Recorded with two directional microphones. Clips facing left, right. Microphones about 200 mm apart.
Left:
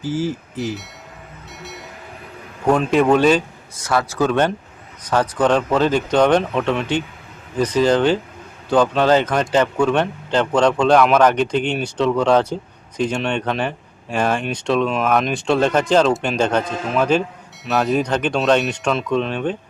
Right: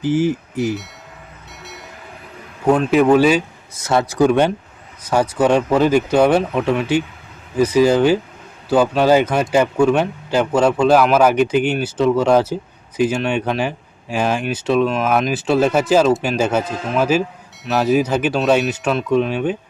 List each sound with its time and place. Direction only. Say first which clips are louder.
0.0 s speech: right 5 dB; 15° right (ahead or behind)
2.6 s speech: right 2 dB; 5° right (ahead or behind)
3.8 s speech: right 4 dB; 20° right (ahead or behind)